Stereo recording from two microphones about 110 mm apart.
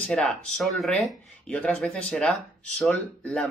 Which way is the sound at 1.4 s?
10° left (ahead or behind).